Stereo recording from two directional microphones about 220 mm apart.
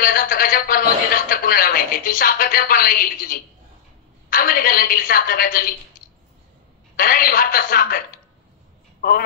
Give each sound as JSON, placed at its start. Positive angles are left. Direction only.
{"t": 0.0, "sound": "a man's voice", "side_deg": 40}
{"t": 7.0, "sound": "a man's voice", "side_deg": 40}